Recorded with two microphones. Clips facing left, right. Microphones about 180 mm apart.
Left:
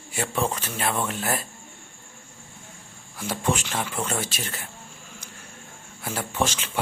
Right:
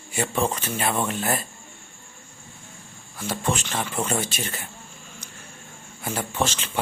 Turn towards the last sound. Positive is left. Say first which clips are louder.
# even
turn(degrees=10)  # may be behind; listen again after turning